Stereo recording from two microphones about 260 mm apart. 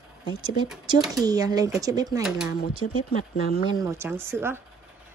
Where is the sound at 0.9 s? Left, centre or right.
Centre.